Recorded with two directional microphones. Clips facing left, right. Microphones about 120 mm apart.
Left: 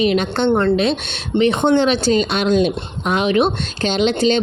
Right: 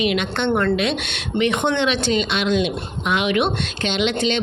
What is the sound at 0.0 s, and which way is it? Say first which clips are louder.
Speech: left 4 dB; 35° left (ahead or behind).